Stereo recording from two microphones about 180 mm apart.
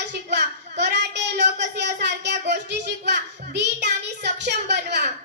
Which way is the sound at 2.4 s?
75° right (ahead or behind).